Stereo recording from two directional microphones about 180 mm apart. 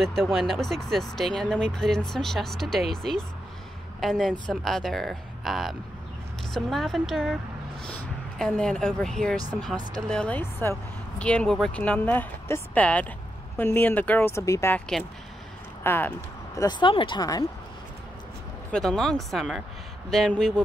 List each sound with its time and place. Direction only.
0.0 s speech: centre (ahead or behind); by 14.8 s 15° left (ahead or behind)
15.8 s speech: 10° left (ahead or behind)
16.6 s speech: 25° left (ahead or behind)
18.7 s speech: 5° left (ahead or behind)